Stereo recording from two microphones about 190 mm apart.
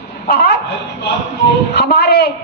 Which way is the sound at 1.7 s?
55° left (ahead or behind).